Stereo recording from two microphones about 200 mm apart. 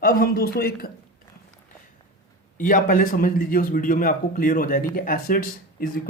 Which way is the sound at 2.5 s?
40° left (ahead or behind).